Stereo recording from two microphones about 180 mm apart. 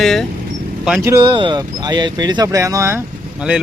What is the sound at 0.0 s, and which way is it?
Speech, centre (ahead or behind).